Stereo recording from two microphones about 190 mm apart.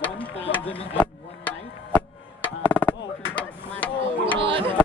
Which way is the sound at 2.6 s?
10° left (ahead or behind).